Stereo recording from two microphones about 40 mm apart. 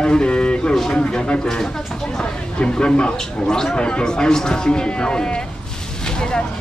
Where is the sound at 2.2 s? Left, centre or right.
Left.